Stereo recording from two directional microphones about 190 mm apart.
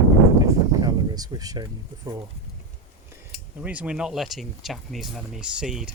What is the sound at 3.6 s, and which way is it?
Speech, 5° right (ahead or behind).